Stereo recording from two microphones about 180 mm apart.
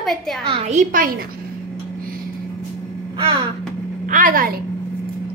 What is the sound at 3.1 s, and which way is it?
Speech, 25° right (ahead or behind).